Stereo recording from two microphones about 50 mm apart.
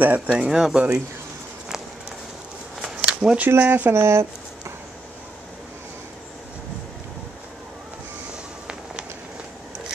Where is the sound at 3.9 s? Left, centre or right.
Right.